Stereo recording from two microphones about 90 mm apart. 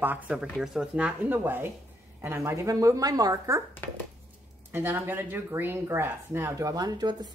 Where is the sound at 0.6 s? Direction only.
5° right (ahead or behind).